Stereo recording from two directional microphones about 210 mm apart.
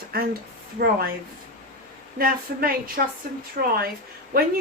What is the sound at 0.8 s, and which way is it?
Speech, 45° right (ahead or behind).